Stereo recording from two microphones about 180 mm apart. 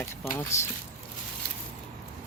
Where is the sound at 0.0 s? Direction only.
15° left (ahead or behind).